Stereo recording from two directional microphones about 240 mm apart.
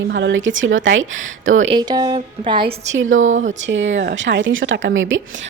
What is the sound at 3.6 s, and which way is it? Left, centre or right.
A woman's voice, right.